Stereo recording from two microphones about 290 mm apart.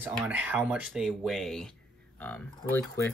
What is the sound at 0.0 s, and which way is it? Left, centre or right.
Speech, centre.